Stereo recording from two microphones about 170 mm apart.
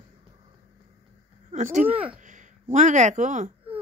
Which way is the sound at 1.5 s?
45° right (ahead or behind).